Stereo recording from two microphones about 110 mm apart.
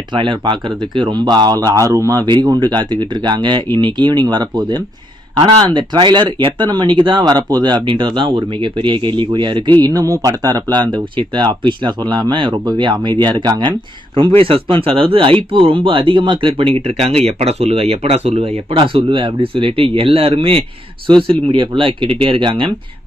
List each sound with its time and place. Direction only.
0.1 s speech: 45° right (ahead or behind)
14.4 s speech: 55° right (ahead or behind)